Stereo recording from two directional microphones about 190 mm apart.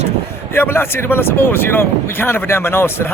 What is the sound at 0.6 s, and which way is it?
Speech, 10° left (ahead or behind).